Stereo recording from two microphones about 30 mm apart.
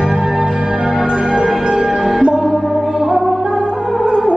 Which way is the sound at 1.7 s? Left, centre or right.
Centre.